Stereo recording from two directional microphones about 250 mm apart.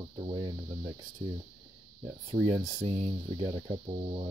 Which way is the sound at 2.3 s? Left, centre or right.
Centre.